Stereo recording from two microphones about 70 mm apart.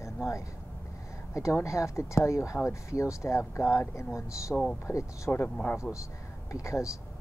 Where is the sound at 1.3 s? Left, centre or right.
Left.